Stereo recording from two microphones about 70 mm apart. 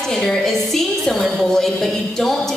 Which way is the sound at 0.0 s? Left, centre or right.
Centre.